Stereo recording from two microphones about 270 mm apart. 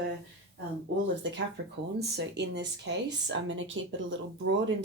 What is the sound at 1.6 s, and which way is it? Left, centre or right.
Speech, right.